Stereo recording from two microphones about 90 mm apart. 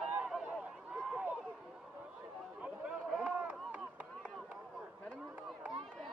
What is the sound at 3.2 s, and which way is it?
Chop, 15° right (ahead or behind).